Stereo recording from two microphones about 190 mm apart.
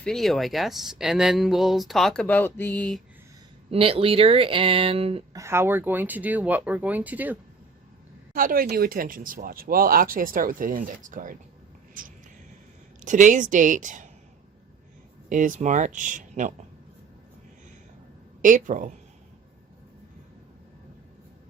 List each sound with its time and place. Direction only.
0.0 s speech: centre (ahead or behind)
3.7 s speech: 30° right (ahead or behind)
5.3 s speech: 15° right (ahead or behind)
8.3 s speech: 50° right (ahead or behind)
15.3 s speech: 45° right (ahead or behind)
18.4 s speech: 40° right (ahead or behind)